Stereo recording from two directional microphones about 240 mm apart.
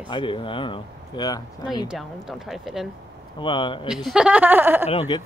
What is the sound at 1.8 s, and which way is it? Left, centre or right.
Speech, centre.